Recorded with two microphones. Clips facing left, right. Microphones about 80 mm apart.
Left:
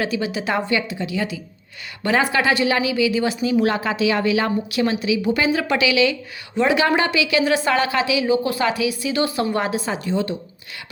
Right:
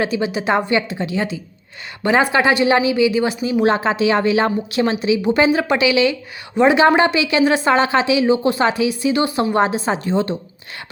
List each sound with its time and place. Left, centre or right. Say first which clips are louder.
0.0 s a woman's voice: right 3 dB; right
2.3 s a woman's voice: right 4 dB; right